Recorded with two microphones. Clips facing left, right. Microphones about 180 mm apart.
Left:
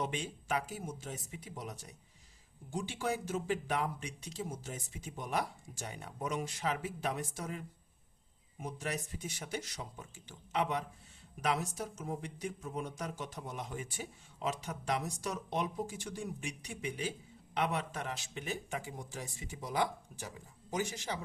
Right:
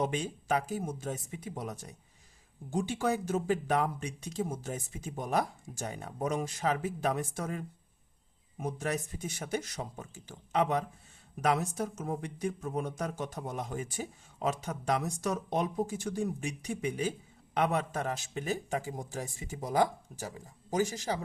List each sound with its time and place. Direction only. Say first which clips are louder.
0.0 s speech: right 6 dB; 40° right (ahead or behind)